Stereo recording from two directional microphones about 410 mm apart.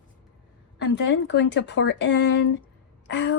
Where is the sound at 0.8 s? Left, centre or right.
Left.